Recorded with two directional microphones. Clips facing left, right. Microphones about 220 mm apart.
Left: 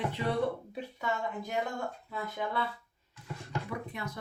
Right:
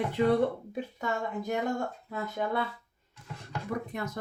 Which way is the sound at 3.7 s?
45° right (ahead or behind).